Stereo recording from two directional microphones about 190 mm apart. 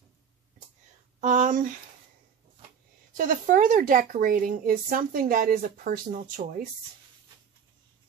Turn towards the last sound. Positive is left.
turn(degrees=-40)  # may be behind; listen again after turning